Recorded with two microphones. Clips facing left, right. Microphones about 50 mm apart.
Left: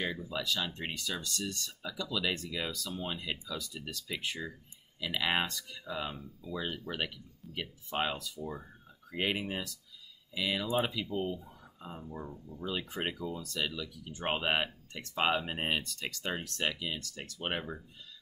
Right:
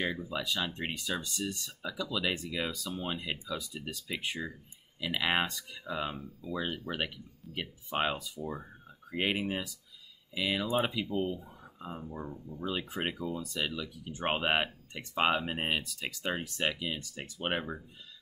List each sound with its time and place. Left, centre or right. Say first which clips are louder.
0.0 s speech: right 2 dB; centre